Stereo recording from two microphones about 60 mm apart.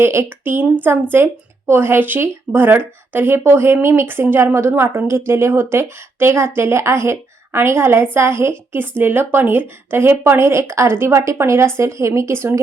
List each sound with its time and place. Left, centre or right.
0.0 s speech: right